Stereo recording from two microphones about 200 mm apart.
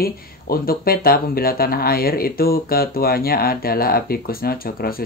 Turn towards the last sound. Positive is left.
turn(degrees=50)  # may be behind; listen again after turning